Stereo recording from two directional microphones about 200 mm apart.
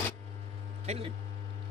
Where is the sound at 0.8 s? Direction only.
30° right (ahead or behind).